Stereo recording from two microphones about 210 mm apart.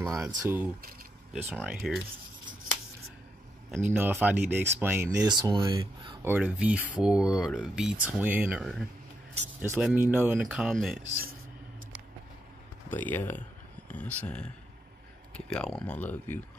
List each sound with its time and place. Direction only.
0.0 s speech: centre (ahead or behind)
3.9 s speech: 10° right (ahead or behind)
5.3 s speech: 20° right (ahead or behind)
6.2 s speech: 10° right (ahead or behind)
12.9 s speech: 10° left (ahead or behind)